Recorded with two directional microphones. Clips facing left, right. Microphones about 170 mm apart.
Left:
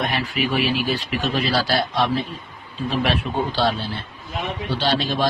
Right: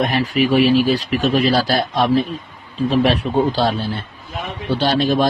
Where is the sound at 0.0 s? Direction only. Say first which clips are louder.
Right 6 dB; 40° right (ahead or behind).